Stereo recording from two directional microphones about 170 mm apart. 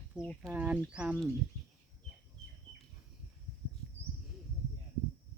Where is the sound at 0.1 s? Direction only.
5° right (ahead or behind).